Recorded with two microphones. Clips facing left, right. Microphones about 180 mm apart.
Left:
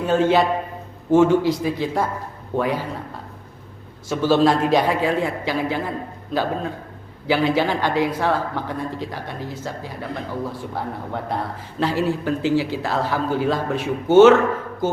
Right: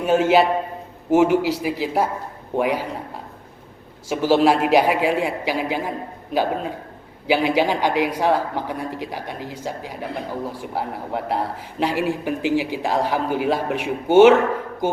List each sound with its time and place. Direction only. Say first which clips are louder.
0.0 s speech: right 1 dB; 10° right (ahead or behind)
4.1 s speech: even; 10° right (ahead or behind)